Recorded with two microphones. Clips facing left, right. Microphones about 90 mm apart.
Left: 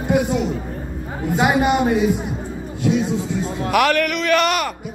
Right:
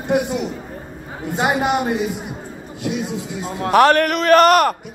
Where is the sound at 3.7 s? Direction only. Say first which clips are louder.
Right 5 dB; 35° right (ahead or behind).